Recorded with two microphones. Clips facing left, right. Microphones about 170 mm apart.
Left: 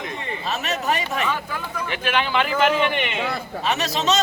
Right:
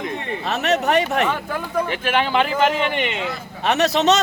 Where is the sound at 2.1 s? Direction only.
40° right (ahead or behind).